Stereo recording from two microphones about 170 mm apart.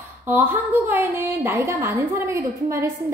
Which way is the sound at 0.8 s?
10° right (ahead or behind).